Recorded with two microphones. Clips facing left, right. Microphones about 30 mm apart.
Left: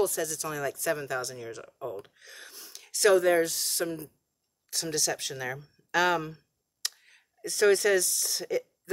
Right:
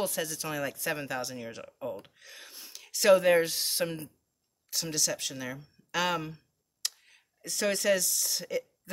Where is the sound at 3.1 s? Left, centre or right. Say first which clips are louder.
Right 3 dB; right.